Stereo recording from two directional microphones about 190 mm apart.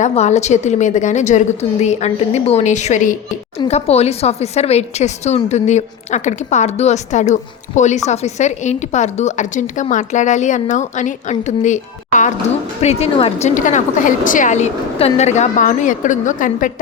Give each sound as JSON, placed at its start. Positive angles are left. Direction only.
{"t": 0.0, "sound": "a woman's voice", "side_deg": 35}